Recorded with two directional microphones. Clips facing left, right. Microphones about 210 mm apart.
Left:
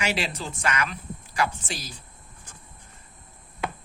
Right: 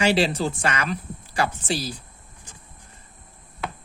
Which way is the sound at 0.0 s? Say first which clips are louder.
Right 8 dB; 30° right (ahead or behind).